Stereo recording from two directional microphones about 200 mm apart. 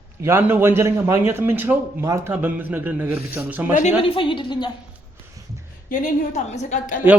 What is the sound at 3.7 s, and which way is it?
Speech, 30° left (ahead or behind).